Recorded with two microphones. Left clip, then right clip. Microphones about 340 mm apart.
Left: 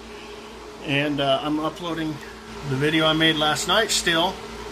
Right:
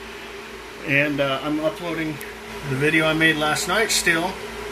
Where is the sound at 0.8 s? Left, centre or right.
Centre.